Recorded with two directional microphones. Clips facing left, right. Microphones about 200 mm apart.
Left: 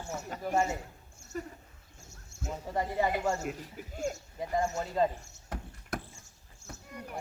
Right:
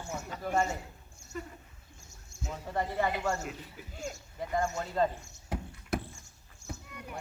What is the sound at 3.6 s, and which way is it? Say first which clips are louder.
Speech: left 6 dB; 45° left (ahead or behind).